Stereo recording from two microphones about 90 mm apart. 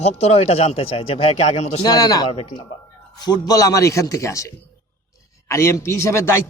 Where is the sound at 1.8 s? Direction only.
50° left (ahead or behind).